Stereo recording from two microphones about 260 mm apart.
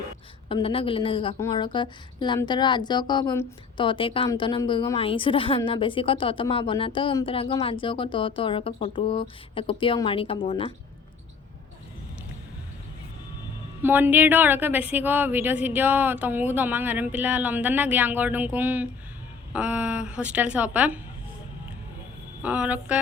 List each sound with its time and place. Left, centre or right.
0.4 s a woman's voice: left
13.8 s a woman's voice: centre
22.4 s a woman's voice: centre